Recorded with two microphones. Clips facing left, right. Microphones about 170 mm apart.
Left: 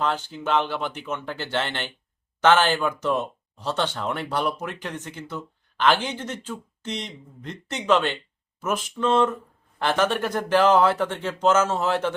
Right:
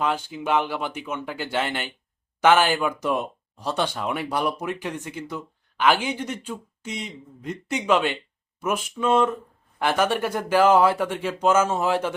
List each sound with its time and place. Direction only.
0.0 s speech: 10° right (ahead or behind)